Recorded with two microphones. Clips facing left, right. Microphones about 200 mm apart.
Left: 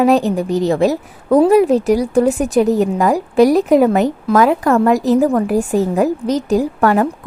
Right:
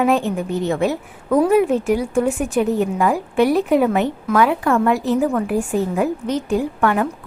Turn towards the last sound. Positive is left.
turn(degrees=40)  # may be behind; listen again after turning